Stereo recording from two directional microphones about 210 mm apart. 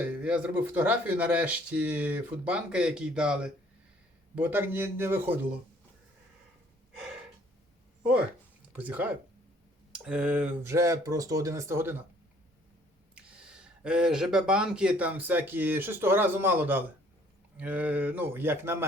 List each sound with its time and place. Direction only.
0.0 s speech: 5° right (ahead or behind)
8.7 s speech: 10° right (ahead or behind)
13.1 s speech: 5° right (ahead or behind)